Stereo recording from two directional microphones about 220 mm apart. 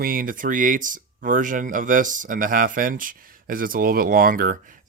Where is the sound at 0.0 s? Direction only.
40° right (ahead or behind).